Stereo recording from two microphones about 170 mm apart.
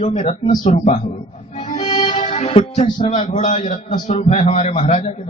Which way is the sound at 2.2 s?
35° left (ahead or behind).